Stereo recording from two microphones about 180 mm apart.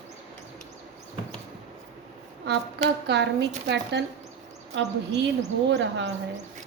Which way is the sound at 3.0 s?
70° right (ahead or behind).